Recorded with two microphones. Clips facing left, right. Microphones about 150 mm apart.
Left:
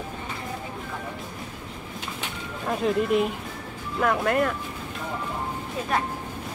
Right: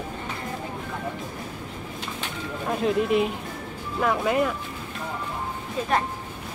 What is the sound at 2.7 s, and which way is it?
Speech, centre (ahead or behind).